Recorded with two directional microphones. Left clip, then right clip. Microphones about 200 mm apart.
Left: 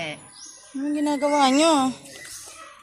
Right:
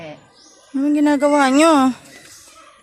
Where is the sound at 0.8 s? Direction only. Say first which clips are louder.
Right 8 dB; 45° right (ahead or behind).